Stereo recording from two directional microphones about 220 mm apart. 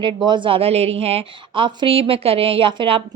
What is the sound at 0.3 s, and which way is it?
A woman's voice, 20° right (ahead or behind).